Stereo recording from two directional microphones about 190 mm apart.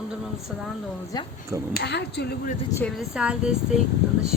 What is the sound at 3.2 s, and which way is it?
Speech, 5° right (ahead or behind).